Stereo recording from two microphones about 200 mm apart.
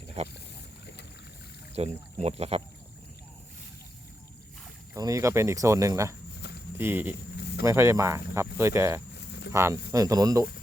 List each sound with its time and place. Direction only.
0.2 s speech: 35° right (ahead or behind)
1.7 s speech: 30° right (ahead or behind)
4.9 s speech: 15° right (ahead or behind)